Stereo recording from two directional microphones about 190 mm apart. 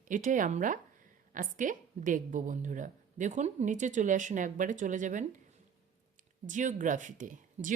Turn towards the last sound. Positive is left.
turn(degrees=-45)  # may be behind; listen again after turning